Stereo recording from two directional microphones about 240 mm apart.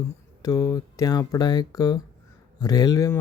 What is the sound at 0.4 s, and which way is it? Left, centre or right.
Speech, centre.